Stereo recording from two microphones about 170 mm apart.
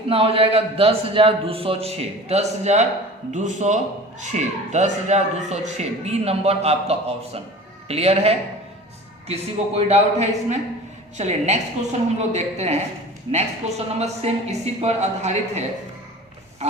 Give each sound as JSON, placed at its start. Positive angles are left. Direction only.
{"t": 0.1, "sound": "speech", "side_deg": -35}